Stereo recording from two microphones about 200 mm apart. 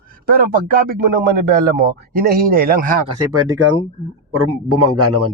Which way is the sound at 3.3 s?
85° right.